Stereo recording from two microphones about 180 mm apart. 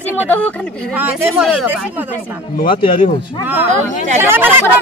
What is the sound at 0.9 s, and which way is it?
Speech, 10° right (ahead or behind).